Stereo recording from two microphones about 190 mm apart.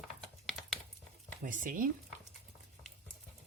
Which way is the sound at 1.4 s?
45° right (ahead or behind).